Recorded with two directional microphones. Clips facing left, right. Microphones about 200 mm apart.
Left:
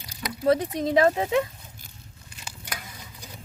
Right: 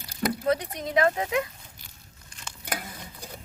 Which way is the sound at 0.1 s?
55° right (ahead or behind).